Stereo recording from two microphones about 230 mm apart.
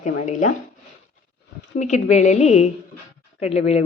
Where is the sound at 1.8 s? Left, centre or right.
Left.